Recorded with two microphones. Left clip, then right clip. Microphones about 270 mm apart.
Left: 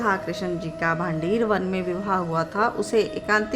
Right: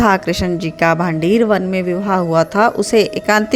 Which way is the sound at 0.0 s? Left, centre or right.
Right.